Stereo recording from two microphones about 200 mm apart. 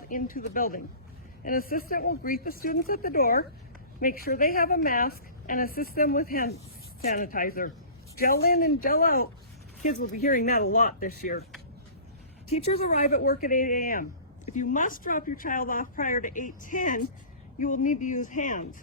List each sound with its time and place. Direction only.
0.1 s speech: 45° left (ahead or behind)
12.5 s speech: 30° left (ahead or behind)
13.1 s speech: 45° left (ahead or behind)